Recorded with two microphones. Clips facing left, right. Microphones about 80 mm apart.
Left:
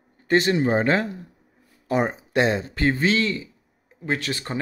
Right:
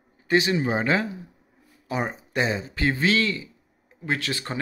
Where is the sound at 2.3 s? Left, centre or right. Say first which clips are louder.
Left 4 dB; left.